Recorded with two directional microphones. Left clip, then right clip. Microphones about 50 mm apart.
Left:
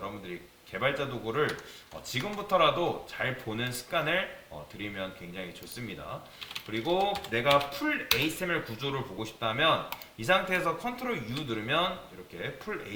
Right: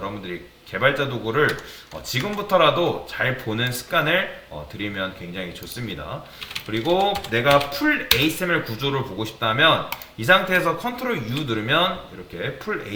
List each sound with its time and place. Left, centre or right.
0.3 s speech: right
7.7 s speech: right
8.2 s speech: right